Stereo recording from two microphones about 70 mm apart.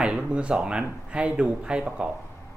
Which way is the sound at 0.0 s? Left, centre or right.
Centre.